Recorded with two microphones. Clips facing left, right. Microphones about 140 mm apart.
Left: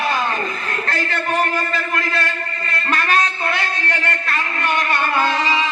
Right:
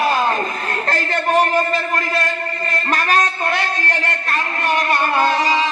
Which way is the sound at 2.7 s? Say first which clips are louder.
Right 1 dB; 40° right (ahead or behind).